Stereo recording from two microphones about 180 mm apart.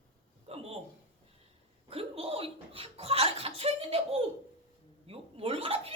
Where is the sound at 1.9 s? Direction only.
35° right (ahead or behind).